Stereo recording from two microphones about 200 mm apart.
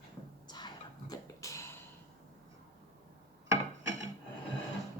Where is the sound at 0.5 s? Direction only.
20° left (ahead or behind).